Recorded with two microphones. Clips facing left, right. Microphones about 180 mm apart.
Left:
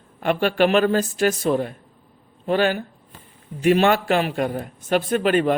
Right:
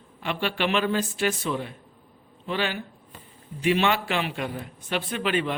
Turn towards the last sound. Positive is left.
turn(degrees=45)  # may be behind; listen again after turning